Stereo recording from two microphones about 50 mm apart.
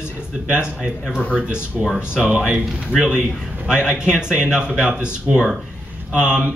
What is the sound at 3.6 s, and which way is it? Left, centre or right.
Speech, right.